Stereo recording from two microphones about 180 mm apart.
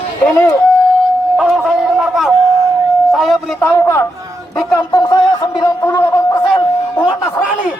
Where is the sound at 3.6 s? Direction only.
15° left (ahead or behind).